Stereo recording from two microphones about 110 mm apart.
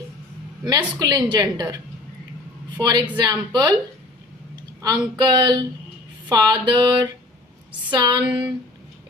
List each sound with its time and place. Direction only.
0.6 s a woman's voice: 40° right (ahead or behind)
3.2 s a woman's voice: 40° right (ahead or behind)